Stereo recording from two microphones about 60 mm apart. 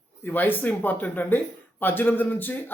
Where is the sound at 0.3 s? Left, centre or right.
Left.